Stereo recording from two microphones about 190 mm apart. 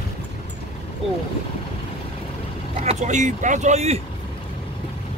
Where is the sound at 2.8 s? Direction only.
40° right (ahead or behind).